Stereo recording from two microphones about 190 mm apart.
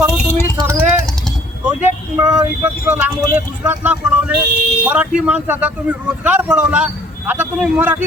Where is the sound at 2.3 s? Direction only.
5° right (ahead or behind).